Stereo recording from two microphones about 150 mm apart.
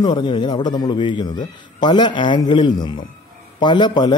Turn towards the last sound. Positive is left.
turn(degrees=30)  # may be behind; listen again after turning